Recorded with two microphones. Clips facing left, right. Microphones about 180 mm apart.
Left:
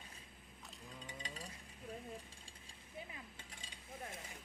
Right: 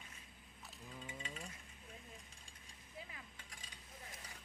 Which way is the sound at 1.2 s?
35° left (ahead or behind).